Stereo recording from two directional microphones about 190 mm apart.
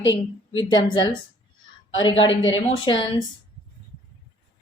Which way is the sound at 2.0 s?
25° left (ahead or behind).